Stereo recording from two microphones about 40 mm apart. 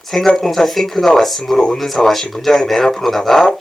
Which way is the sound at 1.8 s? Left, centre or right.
Centre.